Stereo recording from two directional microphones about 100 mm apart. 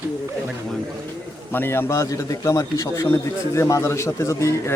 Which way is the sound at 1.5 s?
20° left (ahead or behind).